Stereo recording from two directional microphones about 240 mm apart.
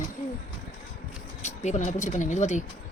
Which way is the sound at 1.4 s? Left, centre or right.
Left.